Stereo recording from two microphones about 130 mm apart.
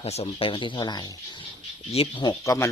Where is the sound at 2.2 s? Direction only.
25° left (ahead or behind).